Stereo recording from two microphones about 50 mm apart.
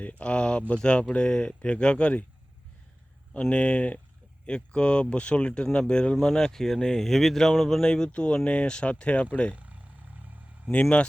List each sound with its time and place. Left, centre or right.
0.0 s speech: left
3.4 s speech: left
5.6 s speech: centre; by 9.6 s left